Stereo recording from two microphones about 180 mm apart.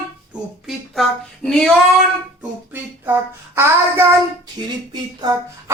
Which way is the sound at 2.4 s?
10° right (ahead or behind).